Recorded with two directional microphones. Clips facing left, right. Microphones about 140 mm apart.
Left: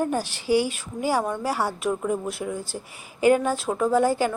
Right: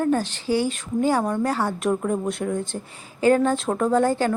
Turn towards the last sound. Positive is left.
turn(degrees=10)  # may be behind; listen again after turning